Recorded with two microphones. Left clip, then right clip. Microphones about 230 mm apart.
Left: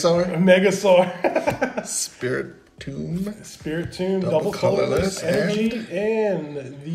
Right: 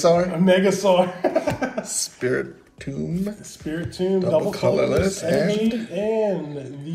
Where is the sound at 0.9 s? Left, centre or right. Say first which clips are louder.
Left 2 dB; left.